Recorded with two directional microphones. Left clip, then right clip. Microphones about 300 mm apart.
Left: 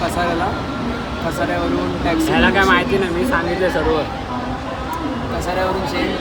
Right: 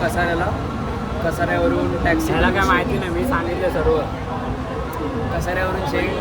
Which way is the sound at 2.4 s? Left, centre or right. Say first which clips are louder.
Left 5 dB; left.